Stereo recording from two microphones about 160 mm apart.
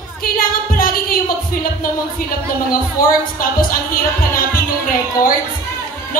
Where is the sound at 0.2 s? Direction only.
65° left (ahead or behind).